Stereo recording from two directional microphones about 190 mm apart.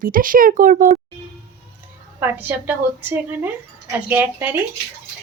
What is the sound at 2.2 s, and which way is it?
A woman's voice, 10° right (ahead or behind).